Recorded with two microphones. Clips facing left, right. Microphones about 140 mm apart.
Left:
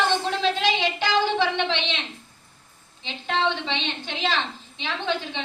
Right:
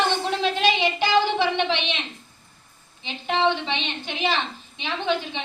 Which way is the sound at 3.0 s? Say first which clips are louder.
Right 3 dB; 15° right (ahead or behind).